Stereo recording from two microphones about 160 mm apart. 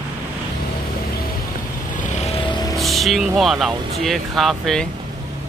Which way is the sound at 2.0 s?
45° left (ahead or behind).